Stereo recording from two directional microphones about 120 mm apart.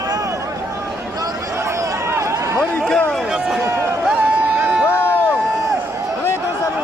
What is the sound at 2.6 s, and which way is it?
Run, 5° left (ahead or behind).